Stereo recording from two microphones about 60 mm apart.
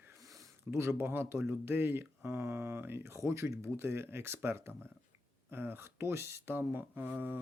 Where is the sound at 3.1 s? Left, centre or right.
Right.